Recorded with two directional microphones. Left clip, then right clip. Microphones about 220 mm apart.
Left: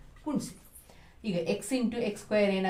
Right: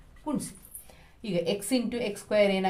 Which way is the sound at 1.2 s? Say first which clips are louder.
Right 2 dB; 40° right (ahead or behind).